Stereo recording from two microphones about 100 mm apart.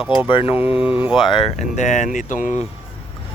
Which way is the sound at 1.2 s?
55° left (ahead or behind).